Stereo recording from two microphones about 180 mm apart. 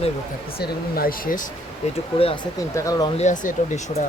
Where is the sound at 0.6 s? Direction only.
55° left (ahead or behind).